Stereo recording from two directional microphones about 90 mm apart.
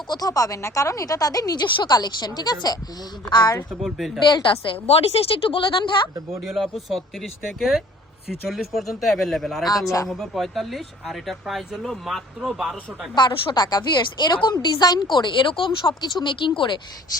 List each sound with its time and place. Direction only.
0.1 s speech: 45° left (ahead or behind)
1.6 s a woman's voice: 60° left (ahead or behind)
3.8 s speech: centre (ahead or behind)
4.7 s speech: 90° left; by 6.1 s 60° left (ahead or behind)
6.5 s speech: centre (ahead or behind)
9.6 s speech: 40° left (ahead or behind)
10.1 s speech: centre (ahead or behind)
13.1 s a woman's voice: 55° left (ahead or behind)
15.1 s speech: 60° left (ahead or behind)